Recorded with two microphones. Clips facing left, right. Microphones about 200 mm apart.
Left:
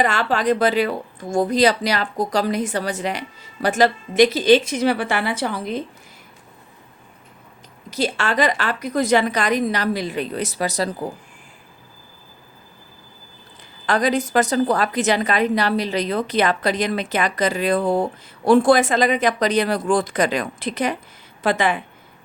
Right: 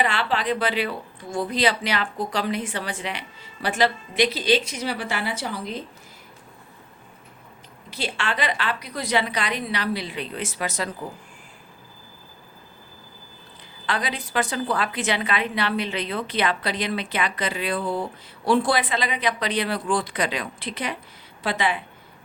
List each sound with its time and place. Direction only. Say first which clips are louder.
0.0 s a woman's voice: left 5 dB; 45° left (ahead or behind)
7.9 s a woman's voice: left 6 dB; 40° left (ahead or behind)
13.8 s a woman's voice: left 9 dB; 45° left (ahead or behind)